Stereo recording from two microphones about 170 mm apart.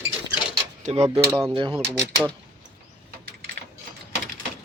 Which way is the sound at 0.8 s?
40° right (ahead or behind).